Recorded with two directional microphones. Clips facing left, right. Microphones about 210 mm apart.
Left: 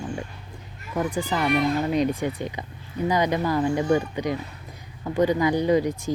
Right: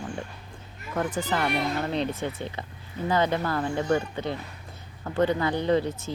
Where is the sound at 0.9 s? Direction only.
10° left (ahead or behind).